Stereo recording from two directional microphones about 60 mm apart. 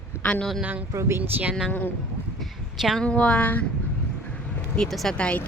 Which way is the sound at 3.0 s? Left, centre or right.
Centre.